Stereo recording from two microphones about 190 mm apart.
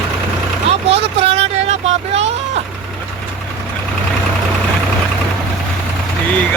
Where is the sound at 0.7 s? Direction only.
30° right (ahead or behind).